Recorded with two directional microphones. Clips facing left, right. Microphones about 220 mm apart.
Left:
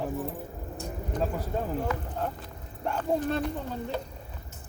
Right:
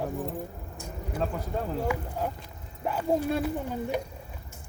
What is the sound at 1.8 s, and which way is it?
Speech, 10° right (ahead or behind).